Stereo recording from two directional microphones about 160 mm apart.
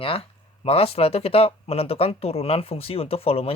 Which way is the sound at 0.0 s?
35° left (ahead or behind).